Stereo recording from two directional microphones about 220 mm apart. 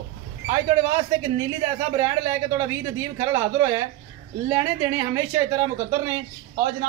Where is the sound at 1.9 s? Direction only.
15° right (ahead or behind).